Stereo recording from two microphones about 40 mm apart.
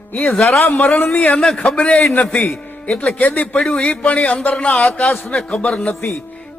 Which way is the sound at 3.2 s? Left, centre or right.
Left.